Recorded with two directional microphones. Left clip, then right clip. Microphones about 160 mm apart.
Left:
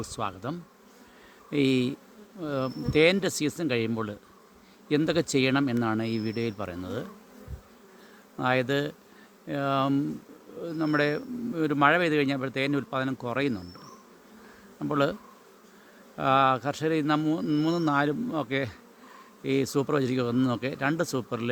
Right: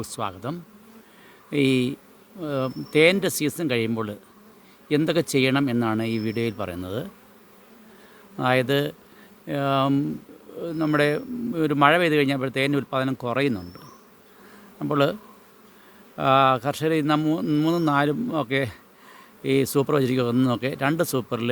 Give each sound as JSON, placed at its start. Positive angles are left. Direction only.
{"t": 0.0, "sound": "speech", "side_deg": -10}
{"t": 8.4, "sound": "speech", "side_deg": -25}
{"t": 14.8, "sound": "speech", "side_deg": -20}
{"t": 16.1, "sound": "speech", "side_deg": -20}